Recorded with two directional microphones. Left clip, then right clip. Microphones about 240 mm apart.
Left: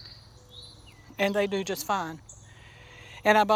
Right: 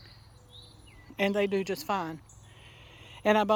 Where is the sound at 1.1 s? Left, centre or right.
Centre.